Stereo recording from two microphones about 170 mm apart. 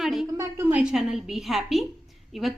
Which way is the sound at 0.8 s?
5° right (ahead or behind).